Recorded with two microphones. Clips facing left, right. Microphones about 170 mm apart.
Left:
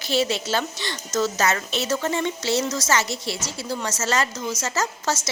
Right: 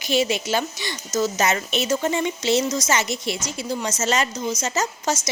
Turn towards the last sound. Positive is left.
turn(degrees=-15)  # may be behind; listen again after turning